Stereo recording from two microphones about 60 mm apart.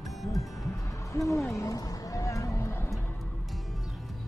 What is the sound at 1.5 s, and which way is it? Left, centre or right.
Music, left.